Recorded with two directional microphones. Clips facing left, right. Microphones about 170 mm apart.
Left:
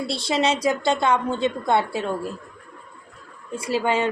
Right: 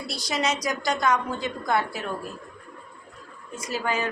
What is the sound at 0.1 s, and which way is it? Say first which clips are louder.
A woman's voice: left 4 dB; 25° left (ahead or behind).